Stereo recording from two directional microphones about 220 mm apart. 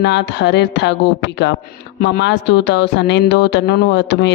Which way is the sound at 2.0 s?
50° left (ahead or behind).